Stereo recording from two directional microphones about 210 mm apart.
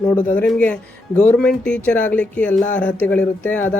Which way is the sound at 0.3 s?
5° left (ahead or behind).